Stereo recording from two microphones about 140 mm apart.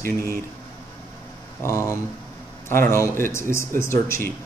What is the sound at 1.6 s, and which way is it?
Speech, 20° left (ahead or behind).